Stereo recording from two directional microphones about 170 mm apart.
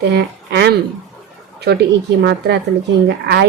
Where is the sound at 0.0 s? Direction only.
85° right.